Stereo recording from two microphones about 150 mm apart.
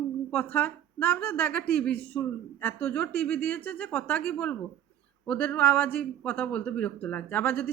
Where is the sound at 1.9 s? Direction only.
90° right.